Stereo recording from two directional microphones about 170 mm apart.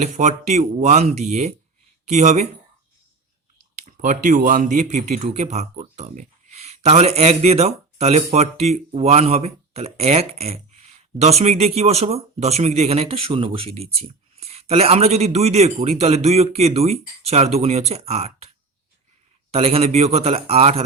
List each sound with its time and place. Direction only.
0.0 s speech: 45° right (ahead or behind)
3.8 s speech: 50° right (ahead or behind)